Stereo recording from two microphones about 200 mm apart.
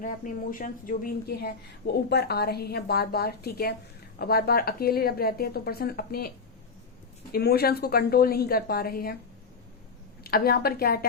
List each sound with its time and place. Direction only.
0.0 s a woman's voice: 40° left (ahead or behind)
7.3 s a woman's voice: 50° left (ahead or behind)
10.2 s a woman's voice: 50° left (ahead or behind)